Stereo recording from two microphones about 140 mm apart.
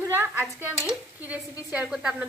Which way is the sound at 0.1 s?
15° right (ahead or behind).